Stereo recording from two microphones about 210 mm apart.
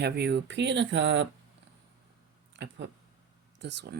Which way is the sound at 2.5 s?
55° right (ahead or behind).